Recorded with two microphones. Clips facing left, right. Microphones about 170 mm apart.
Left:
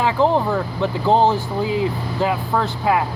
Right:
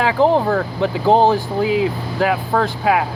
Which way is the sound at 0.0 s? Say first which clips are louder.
Right 2 dB; 60° right (ahead or behind).